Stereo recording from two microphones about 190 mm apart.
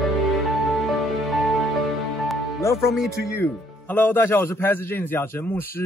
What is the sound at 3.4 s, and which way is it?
Speech, 10° left (ahead or behind).